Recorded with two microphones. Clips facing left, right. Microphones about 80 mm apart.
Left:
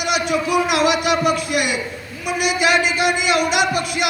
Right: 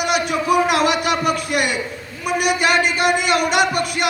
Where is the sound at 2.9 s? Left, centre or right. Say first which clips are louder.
Right 1 dB; right.